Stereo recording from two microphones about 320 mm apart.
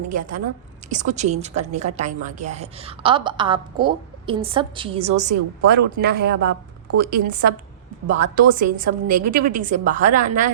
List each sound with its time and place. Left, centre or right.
0.9 s a woman's voice: right